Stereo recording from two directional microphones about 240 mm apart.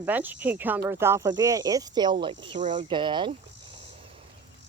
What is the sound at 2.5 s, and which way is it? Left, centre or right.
Speech, right.